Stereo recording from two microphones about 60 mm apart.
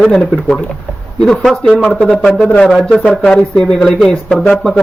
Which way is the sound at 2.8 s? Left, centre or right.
Centre.